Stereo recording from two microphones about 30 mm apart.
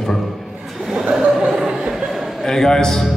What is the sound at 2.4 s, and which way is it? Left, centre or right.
Speech, centre.